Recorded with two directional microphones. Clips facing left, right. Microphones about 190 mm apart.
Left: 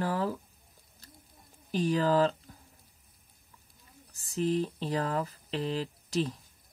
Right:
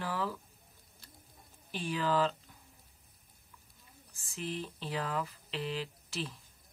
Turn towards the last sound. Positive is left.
turn(degrees=40)  # may be behind; listen again after turning